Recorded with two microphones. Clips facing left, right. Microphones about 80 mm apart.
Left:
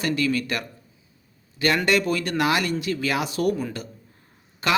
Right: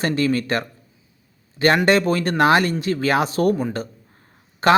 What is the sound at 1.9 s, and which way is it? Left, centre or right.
Speech, right.